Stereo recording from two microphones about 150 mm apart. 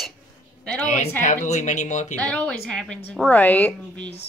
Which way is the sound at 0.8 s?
55° left (ahead or behind).